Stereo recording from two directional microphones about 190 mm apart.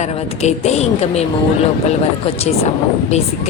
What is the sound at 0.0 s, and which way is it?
A man's voice, 35° left (ahead or behind).